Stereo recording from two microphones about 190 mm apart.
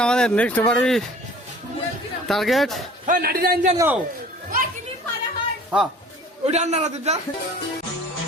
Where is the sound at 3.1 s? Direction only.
50° right (ahead or behind).